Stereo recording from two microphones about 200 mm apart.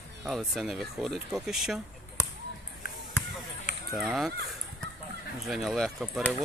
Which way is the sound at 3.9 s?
Centre (ahead or behind).